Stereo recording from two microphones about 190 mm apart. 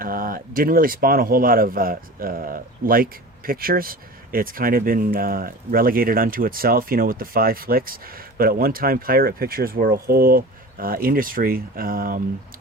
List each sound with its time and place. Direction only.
0.0 s speech: 50° right (ahead or behind)